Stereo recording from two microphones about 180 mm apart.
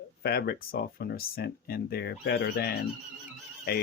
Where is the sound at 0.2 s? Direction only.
65° left (ahead or behind).